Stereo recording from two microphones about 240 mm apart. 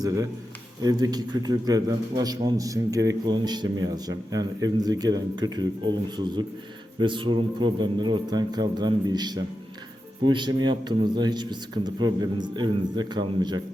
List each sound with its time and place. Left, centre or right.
0.0 s a man's voice: centre